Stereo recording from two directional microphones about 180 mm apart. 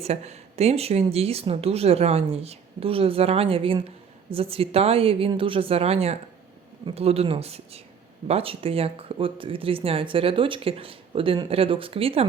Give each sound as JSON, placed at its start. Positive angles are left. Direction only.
{"t": 0.0, "sound": "speech", "side_deg": -35}